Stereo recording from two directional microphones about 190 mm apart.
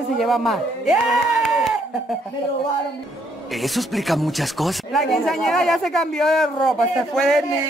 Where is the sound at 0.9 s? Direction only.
5° right (ahead or behind).